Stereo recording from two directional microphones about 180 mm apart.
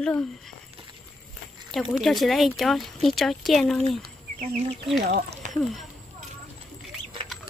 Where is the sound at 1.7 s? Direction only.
Centre (ahead or behind).